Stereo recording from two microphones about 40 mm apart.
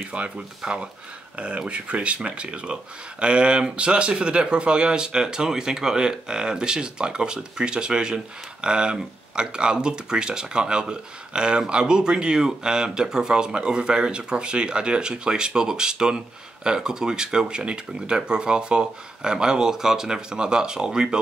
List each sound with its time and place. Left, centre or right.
0.1 s speech: right